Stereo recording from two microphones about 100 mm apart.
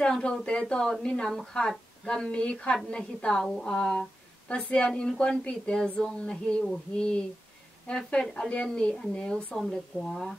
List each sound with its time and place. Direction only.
0.0 s a woman's voice: 10° left (ahead or behind)